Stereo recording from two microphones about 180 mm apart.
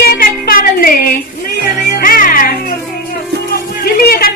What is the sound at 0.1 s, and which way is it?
Music, 55° left (ahead or behind).